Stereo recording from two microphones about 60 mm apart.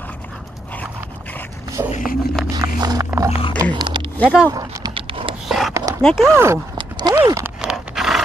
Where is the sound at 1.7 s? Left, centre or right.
Right.